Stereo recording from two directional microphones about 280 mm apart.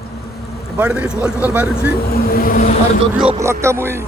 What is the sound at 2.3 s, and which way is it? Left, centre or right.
Vehicle, left.